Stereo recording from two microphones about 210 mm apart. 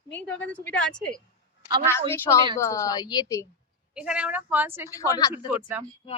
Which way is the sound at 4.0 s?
5° right (ahead or behind).